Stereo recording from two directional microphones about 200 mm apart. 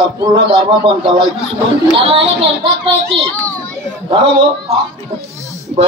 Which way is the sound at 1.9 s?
30° right (ahead or behind).